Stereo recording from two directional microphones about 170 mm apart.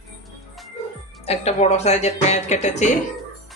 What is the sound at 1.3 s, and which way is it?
Speech, 40° left (ahead or behind).